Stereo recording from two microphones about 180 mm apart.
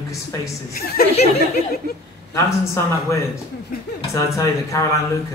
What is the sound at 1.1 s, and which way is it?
Speech, 35° left (ahead or behind).